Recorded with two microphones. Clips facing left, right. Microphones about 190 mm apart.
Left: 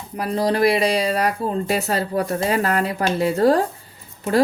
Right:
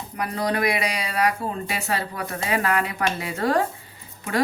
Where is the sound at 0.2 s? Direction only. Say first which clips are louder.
Left 6 dB; 30° left (ahead or behind).